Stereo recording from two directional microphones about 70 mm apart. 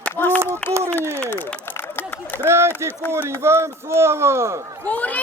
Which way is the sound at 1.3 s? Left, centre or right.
Left.